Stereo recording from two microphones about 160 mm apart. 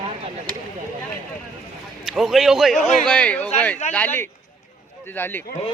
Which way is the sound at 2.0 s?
Centre (ahead or behind).